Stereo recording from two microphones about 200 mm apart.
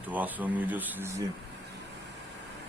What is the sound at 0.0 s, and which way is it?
Speech, 10° right (ahead or behind).